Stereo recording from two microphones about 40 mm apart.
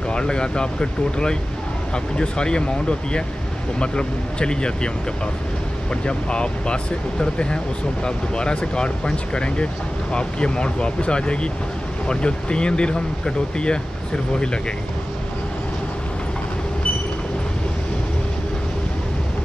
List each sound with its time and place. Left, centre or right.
0.1 s speech: left